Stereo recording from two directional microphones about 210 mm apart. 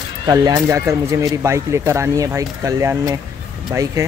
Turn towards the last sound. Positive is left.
turn(degrees=-15)  # may be behind; listen again after turning